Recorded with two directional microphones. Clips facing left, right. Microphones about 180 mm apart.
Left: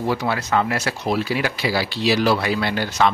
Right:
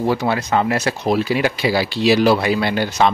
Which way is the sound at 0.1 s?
25° right (ahead or behind).